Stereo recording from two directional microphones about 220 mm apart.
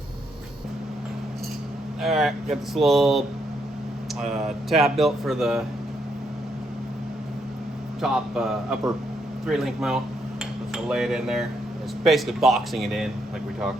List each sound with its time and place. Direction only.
2.0 s speech: centre (ahead or behind)
4.3 s speech: centre (ahead or behind)
8.0 s speech: centre (ahead or behind)